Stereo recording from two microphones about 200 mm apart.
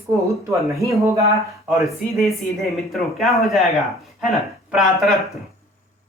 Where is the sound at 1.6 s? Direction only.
Centre (ahead or behind).